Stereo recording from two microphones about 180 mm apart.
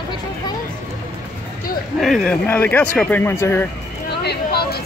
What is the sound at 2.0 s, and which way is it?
Speech, centre (ahead or behind).